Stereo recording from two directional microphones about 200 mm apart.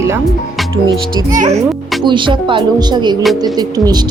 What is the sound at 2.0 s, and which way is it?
Speech, 25° right (ahead or behind).